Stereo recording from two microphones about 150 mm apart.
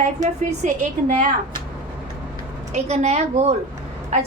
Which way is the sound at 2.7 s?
50° right (ahead or behind).